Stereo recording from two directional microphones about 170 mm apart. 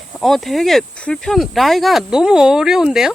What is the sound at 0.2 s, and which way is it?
Speech, centre (ahead or behind).